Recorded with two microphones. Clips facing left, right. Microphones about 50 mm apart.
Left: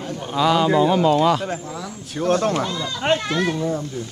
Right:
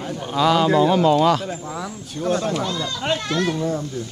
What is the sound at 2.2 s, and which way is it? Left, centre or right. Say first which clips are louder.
Speech: left 3 dB; left.